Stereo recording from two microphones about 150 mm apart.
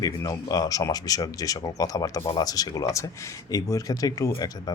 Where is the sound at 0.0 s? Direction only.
25° left (ahead or behind).